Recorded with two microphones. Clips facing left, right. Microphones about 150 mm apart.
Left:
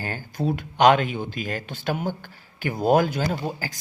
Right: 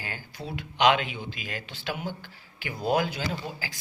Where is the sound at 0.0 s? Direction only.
45° left (ahead or behind).